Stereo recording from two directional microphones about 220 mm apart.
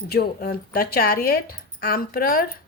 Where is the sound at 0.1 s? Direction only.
45° left (ahead or behind).